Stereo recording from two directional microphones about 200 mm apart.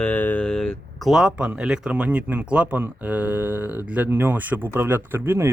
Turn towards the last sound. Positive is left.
turn(degrees=-10)  # may be behind; listen again after turning